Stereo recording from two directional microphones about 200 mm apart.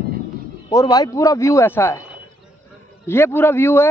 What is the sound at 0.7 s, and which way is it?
Speech, 20° left (ahead or behind).